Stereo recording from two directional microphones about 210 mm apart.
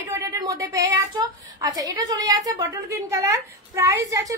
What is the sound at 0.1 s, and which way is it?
A woman's voice, 15° right (ahead or behind).